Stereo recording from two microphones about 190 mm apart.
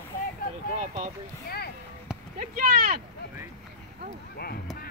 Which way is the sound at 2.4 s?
50° right (ahead or behind).